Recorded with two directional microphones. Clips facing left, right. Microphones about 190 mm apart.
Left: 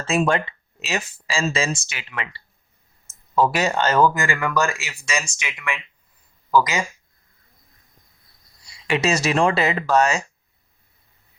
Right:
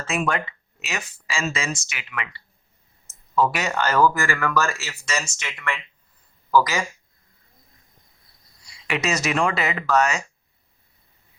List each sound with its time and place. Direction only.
0.0 s speech: 30° left (ahead or behind)
8.9 s speech: 30° left (ahead or behind)